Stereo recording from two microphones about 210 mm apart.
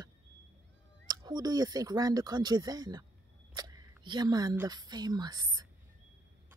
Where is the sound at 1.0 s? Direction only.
20° right (ahead or behind).